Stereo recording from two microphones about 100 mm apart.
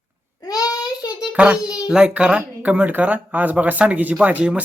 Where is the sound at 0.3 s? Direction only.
40° left (ahead or behind).